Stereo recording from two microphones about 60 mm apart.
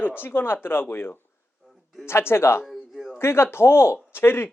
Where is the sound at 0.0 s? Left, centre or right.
Left.